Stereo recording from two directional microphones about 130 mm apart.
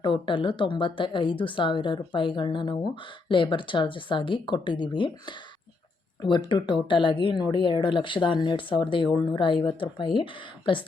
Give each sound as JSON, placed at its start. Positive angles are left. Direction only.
{"t": 0.0, "sound": "speech", "side_deg": 40}
{"t": 6.5, "sound": "speech", "side_deg": 40}